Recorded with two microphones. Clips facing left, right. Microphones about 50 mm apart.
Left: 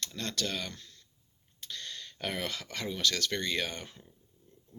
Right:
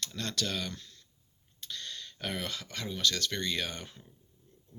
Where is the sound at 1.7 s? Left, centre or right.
Left.